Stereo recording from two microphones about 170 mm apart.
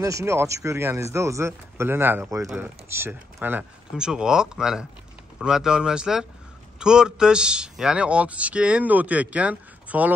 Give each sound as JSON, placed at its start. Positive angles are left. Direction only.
{"t": 0.0, "sound": "a man's voice", "side_deg": -15}